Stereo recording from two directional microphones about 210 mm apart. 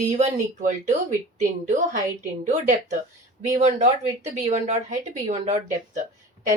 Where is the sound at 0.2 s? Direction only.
35° right (ahead or behind).